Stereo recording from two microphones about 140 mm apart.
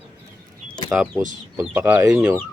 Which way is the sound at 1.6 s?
10° right (ahead or behind).